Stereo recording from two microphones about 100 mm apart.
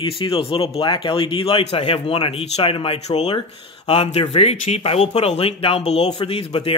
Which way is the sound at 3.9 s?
75° left (ahead or behind).